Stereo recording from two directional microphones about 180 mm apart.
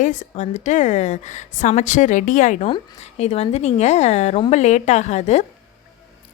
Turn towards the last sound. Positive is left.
turn(degrees=40)  # may be behind; listen again after turning